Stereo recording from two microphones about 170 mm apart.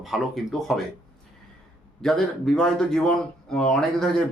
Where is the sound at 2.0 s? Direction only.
5° left (ahead or behind).